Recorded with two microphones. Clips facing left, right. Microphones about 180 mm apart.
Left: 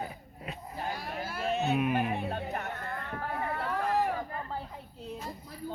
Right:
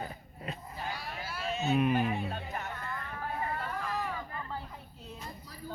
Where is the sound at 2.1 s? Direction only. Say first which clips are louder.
Left 3 dB; 55° left (ahead or behind).